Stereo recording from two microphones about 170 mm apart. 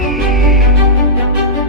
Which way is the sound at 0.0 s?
Centre (ahead or behind).